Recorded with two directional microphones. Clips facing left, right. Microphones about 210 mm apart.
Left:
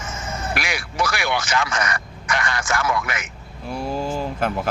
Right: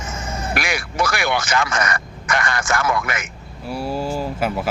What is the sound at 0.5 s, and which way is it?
Speech, 50° right (ahead or behind).